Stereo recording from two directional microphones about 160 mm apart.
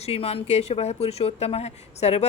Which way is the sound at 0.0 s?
40° left (ahead or behind).